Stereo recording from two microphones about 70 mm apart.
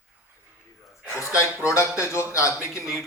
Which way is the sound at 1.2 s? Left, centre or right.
Left.